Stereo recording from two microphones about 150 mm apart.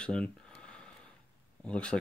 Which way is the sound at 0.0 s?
5° left (ahead or behind).